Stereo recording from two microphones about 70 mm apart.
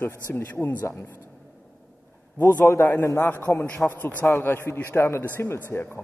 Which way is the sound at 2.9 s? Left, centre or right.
Left.